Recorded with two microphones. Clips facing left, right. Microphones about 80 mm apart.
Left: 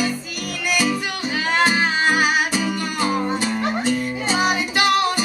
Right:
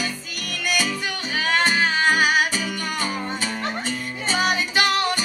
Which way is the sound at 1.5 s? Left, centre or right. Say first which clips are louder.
Left 2 dB; centre.